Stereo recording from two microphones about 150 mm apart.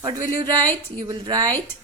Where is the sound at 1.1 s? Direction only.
25° right (ahead or behind).